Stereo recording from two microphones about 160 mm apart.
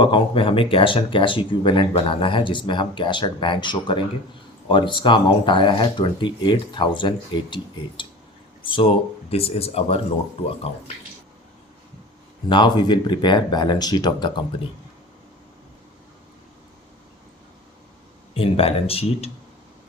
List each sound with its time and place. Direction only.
0.0 s speech: 30° left (ahead or behind)
8.6 s speech: 35° left (ahead or behind)
12.5 s speech: 30° left (ahead or behind)
18.3 s speech: 35° left (ahead or behind)